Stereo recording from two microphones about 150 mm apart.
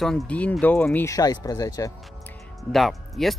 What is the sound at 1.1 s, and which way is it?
Speech, 25° left (ahead or behind).